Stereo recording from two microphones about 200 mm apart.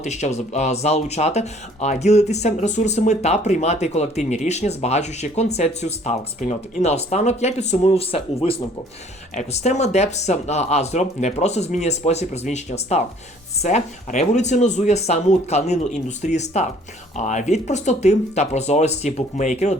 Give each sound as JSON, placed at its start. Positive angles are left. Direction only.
{"t": 0.0, "sound": "speech", "side_deg": 35}